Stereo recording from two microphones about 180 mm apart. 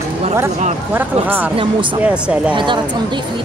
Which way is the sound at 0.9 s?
10° right (ahead or behind).